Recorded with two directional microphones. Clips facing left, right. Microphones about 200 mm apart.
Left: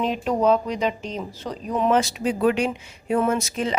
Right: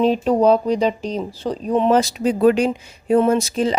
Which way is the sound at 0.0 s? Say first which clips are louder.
Right 6 dB; 35° right (ahead or behind).